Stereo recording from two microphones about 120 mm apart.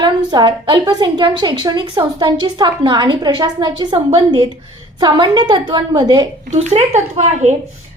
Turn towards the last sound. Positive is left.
turn(degrees=-70)  # may be behind; listen again after turning